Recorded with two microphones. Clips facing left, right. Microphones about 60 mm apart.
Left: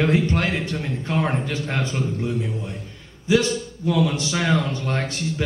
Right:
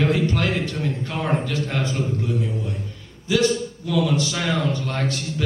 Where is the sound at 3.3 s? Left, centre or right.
Left.